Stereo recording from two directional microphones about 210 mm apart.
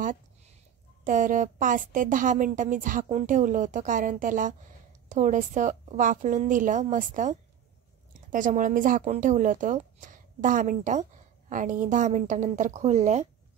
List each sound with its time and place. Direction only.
1.0 s a woman's voice: 40° right (ahead or behind)